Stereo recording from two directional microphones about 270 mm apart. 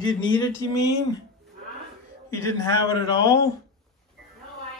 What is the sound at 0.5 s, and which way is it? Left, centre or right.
Speech, centre.